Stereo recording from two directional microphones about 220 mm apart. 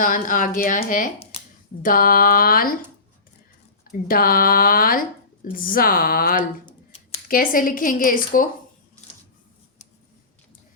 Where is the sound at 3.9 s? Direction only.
40° left (ahead or behind).